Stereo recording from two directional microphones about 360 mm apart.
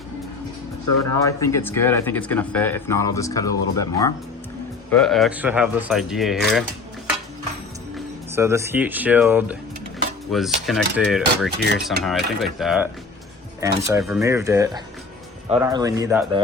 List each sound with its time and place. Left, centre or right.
0.9 s speech: left
1.2 s speech: centre
7.9 s speech: centre